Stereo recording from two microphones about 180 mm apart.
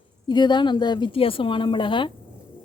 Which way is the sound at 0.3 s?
25° left (ahead or behind).